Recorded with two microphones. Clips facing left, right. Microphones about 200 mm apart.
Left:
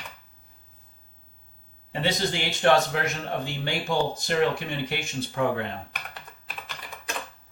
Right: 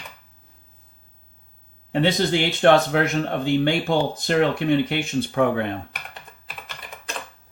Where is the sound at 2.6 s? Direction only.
60° right (ahead or behind).